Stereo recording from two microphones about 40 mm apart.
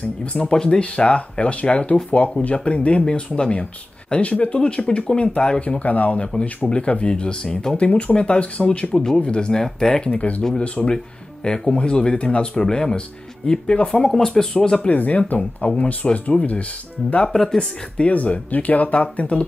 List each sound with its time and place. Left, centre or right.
0.0 s speech: left
5.8 s speech: left
8.9 s speech: centre
10.1 s speech: left
10.6 s speech: left
14.0 s speech: centre
14.8 s speech: left
17.3 s speech: centre
18.1 s speech: left